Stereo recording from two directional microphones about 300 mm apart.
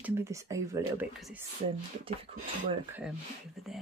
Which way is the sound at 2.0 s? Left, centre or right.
Centre.